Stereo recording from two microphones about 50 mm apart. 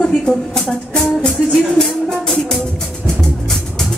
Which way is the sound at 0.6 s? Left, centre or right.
Centre.